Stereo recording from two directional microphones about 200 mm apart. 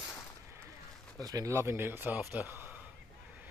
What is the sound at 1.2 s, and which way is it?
Speech, 20° right (ahead or behind).